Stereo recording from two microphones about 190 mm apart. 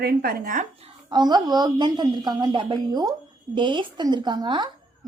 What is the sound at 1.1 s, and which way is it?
A woman's voice, 20° right (ahead or behind).